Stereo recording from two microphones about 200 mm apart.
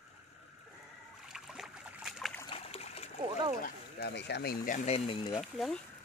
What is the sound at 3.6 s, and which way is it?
Speech, 55° left (ahead or behind).